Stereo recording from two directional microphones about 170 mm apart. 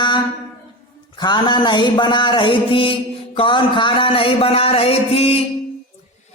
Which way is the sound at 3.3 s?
30° left (ahead or behind).